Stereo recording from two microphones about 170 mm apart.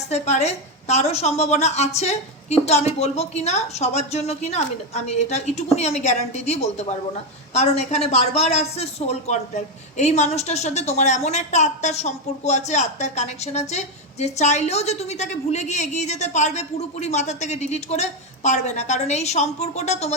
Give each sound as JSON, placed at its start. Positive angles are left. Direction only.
{"t": 0.1, "sound": "a woman's voice", "side_deg": 40}